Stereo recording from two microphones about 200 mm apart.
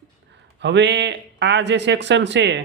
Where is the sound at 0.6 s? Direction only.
60° right (ahead or behind).